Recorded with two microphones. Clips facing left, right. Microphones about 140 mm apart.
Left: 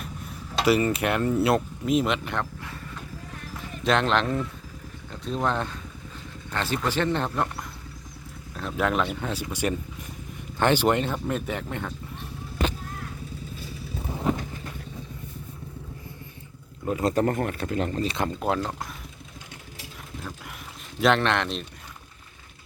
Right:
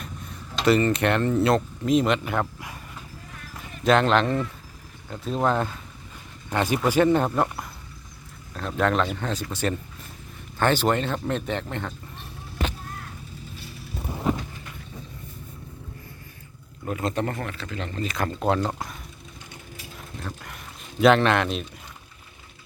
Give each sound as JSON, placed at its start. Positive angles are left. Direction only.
{"t": 0.6, "sound": "speech", "side_deg": 5}
{"t": 2.4, "sound": "a sound", "side_deg": -15}
{"t": 3.8, "sound": "speech", "side_deg": 0}
{"t": 6.5, "sound": "speech", "side_deg": -15}
{"t": 8.5, "sound": "speech", "side_deg": 5}
{"t": 17.0, "sound": "speech", "side_deg": 40}
{"t": 18.3, "sound": "speech", "side_deg": 5}
{"t": 20.2, "sound": "a sound", "side_deg": 5}
{"t": 21.0, "sound": "speech", "side_deg": 0}